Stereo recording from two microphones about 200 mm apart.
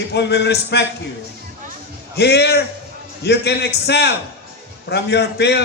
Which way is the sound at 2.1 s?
55° left (ahead or behind).